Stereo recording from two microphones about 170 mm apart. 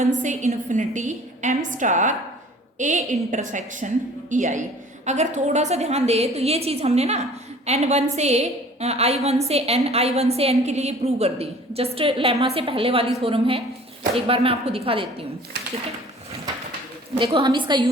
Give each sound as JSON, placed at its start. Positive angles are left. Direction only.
{"t": 0.0, "sound": "a woman's voice", "side_deg": -45}
{"t": 17.2, "sound": "a woman's voice", "side_deg": -25}